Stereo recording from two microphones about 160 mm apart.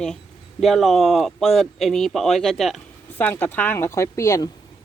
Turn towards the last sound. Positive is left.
turn(degrees=20)  # may be behind; listen again after turning